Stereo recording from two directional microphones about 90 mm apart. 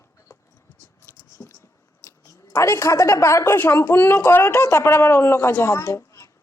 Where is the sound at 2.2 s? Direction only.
30° left (ahead or behind).